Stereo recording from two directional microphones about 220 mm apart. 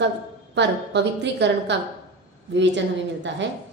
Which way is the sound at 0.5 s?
50° right (ahead or behind).